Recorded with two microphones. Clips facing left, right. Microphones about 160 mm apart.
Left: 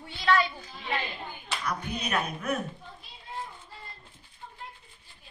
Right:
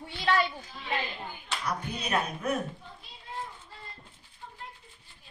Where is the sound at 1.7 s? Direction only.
30° right (ahead or behind).